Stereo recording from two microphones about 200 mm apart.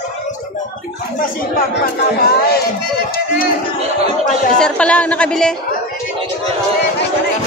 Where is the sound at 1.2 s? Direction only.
45° left (ahead or behind).